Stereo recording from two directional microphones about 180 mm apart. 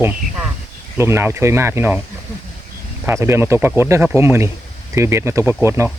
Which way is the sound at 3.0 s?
15° right (ahead or behind).